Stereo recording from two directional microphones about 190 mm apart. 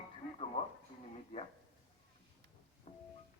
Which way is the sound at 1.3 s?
30° left (ahead or behind).